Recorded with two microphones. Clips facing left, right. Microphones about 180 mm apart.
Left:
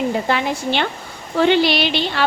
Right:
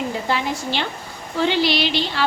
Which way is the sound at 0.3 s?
60° left (ahead or behind).